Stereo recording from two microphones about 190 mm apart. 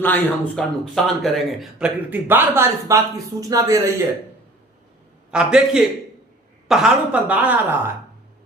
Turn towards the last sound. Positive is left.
turn(degrees=-10)  # may be behind; listen again after turning